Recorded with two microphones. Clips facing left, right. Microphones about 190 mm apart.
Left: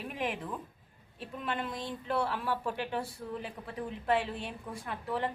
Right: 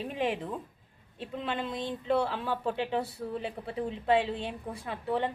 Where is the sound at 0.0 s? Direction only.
25° right (ahead or behind).